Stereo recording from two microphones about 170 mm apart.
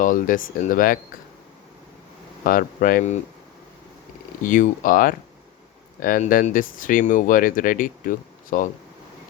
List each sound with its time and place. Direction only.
0.0 s speech: 50° left (ahead or behind)
2.4 s speech: 55° left (ahead or behind)
4.4 s speech: 50° left (ahead or behind)